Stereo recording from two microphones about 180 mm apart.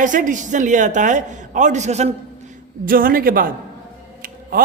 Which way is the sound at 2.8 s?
50° right (ahead or behind).